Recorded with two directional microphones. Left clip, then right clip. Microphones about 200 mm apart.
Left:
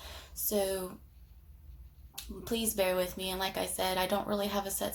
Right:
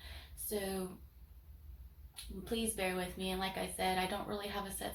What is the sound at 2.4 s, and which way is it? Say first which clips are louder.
A woman's voice: left 6 dB; 40° left (ahead or behind).